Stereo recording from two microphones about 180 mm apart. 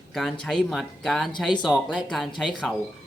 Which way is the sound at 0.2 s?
Centre (ahead or behind).